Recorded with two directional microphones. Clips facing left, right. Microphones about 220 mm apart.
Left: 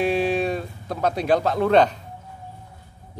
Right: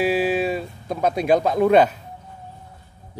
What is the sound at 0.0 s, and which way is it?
Speech, 5° right (ahead or behind).